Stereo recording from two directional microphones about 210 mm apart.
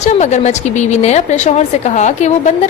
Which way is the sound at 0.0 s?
35° left (ahead or behind).